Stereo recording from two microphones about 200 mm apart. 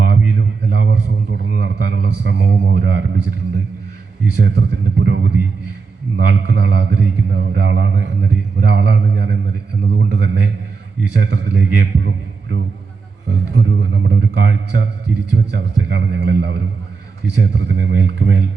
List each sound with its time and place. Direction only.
0.0 s a man's voice: 60° right (ahead or behind)
4.7 s a man's voice: 60° right (ahead or behind)